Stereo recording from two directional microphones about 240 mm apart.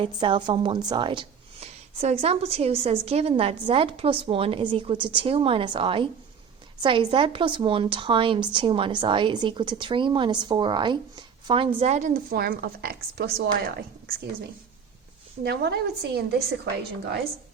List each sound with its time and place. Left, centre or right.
0.0 s a woman's voice: centre; by 14.2 s right
15.4 s a woman's voice: right